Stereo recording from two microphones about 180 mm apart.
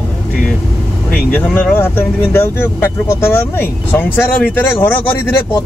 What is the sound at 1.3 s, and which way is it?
Speech, 10° left (ahead or behind).